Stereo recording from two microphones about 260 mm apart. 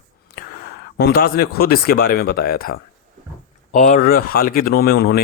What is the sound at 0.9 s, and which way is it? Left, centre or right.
Speech, left.